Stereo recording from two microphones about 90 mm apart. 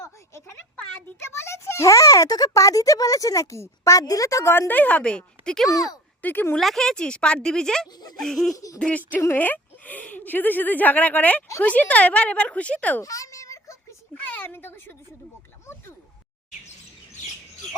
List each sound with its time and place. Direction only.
0.0 s a sound: 30° left (ahead or behind)
1.2 s a child's voice: 30° left (ahead or behind); by 5.6 s 10° left (ahead or behind)
5.6 s speech: 40° left (ahead or behind)
6.2 s speech: 20° left (ahead or behind)
6.6 s a woman's voice: 5° left (ahead or behind)
8.5 s a child's voice: 40° left (ahead or behind)
8.8 s a woman's voice: 15° left (ahead or behind)
13.0 s a sound: 40° left (ahead or behind)
14.1 s speech: 20° left (ahead or behind)